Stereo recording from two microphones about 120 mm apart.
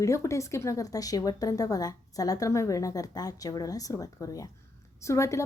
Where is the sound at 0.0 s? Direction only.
25° left (ahead or behind).